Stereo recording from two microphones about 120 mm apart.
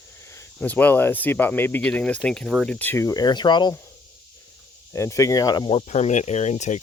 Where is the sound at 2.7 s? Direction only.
15° left (ahead or behind); by 3.7 s 40° left (ahead or behind).